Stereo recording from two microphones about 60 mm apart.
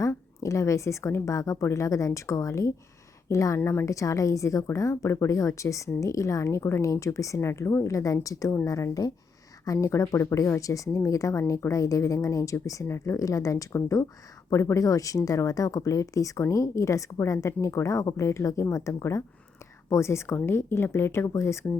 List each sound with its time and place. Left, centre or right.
0.4 s speech: left
3.6 s a woman's voice: left
3.8 s speech: left
7.9 s a woman's voice: left
9.8 s speech: left
19.9 s speech: left